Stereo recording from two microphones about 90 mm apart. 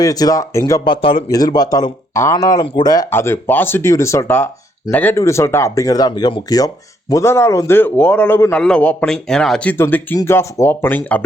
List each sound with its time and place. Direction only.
0.0 s speech: 45° left (ahead or behind)
0.9 s speech: 65° left (ahead or behind)
1.3 s speech: 45° left (ahead or behind)
2.1 s speech: 35° left (ahead or behind)
3.1 s speech: 25° left (ahead or behind)
5.1 s speech: 35° left (ahead or behind)
7.1 s speech: 30° left (ahead or behind)
7.8 s speech: 20° left (ahead or behind)
8.5 s a man's voice: 10° left (ahead or behind)
9.6 s speech: 25° left (ahead or behind)